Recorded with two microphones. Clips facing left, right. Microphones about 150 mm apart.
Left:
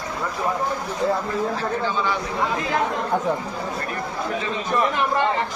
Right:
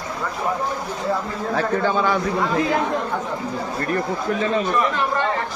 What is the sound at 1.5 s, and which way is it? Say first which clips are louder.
Speech: right 4 dB; 55° right (ahead or behind).